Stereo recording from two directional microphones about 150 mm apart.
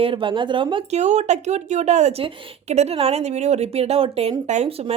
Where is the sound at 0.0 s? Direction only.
35° right (ahead or behind).